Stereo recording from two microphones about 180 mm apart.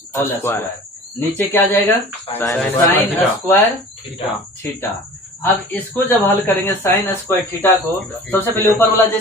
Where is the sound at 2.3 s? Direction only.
30° left (ahead or behind).